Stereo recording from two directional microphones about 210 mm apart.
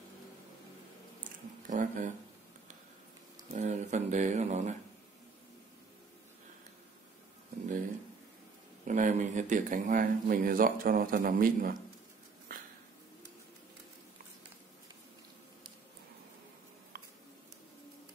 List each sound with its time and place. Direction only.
1.2 s a sound: 40° right (ahead or behind)
3.5 s speech: 35° right (ahead or behind)
8.8 s speech: 35° right (ahead or behind)